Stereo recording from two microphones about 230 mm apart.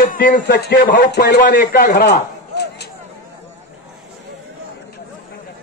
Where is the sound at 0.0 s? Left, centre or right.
Left.